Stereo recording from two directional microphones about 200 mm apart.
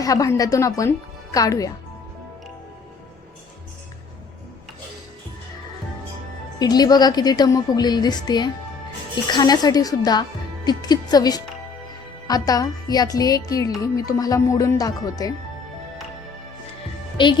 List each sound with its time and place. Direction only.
0.0 s music: 15° left (ahead or behind)
6.6 s a woman's voice: 20° left (ahead or behind)
12.3 s music: 20° left (ahead or behind)
17.2 s a woman's voice: 25° left (ahead or behind)